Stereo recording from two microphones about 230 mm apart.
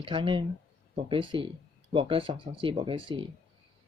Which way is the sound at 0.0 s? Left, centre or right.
Right.